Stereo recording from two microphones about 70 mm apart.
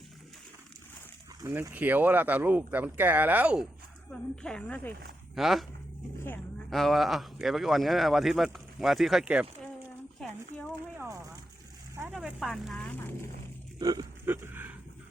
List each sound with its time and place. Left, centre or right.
1.7 s speech: right
4.1 s speech: centre
5.3 s speech: centre
6.7 s speech: centre
10.7 s a sound: right
12.1 s speech: centre
12.7 s speech: centre
13.7 s speech: right
14.3 s a sound: right